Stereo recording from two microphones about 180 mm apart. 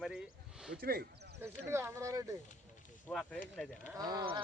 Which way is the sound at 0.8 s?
55° right (ahead or behind).